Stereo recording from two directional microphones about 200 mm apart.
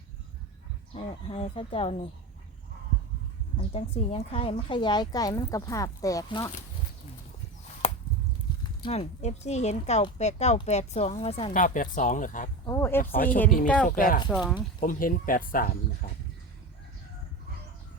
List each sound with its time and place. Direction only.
0.9 s a woman's voice: 30° left (ahead or behind)
3.6 s a woman's voice: 30° left (ahead or behind)
8.8 s speech: 30° left (ahead or behind)
11.5 s speech: 40° left (ahead or behind)
12.6 s speech: 15° left (ahead or behind)
13.0 s speech: 45° left (ahead or behind)
14.3 s speech: 5° right (ahead or behind)
14.8 s speech: 45° left (ahead or behind)